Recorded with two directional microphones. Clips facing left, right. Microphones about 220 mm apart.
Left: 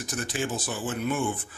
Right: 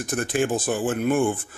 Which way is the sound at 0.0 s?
55° right (ahead or behind).